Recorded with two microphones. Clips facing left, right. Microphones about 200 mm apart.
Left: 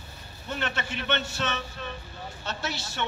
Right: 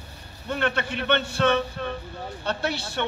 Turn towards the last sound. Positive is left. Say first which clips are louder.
# right 5 dB
turn(degrees=-60)  # may be behind; listen again after turning